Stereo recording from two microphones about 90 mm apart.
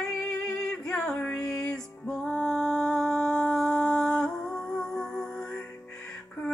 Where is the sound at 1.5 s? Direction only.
10° left (ahead or behind).